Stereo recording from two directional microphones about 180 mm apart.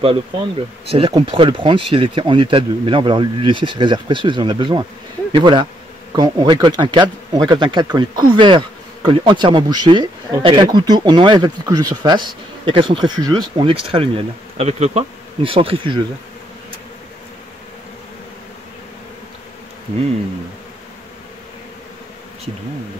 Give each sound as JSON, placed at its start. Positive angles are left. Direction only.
{"t": 0.9, "sound": "speech", "side_deg": -30}
{"t": 13.9, "sound": "bee", "side_deg": -35}